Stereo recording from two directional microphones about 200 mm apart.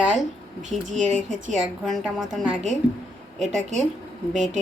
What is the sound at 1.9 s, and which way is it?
Speech, 5° right (ahead or behind).